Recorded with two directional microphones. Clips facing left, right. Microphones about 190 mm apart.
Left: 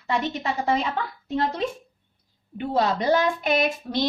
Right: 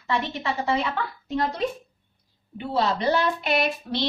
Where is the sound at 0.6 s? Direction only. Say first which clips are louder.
Left 1 dB; 40° left (ahead or behind).